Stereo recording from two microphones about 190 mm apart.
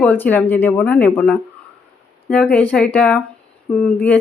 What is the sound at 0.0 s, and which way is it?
Speech, 10° left (ahead or behind).